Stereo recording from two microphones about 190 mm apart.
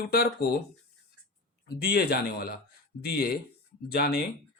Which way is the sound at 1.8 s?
55° left (ahead or behind).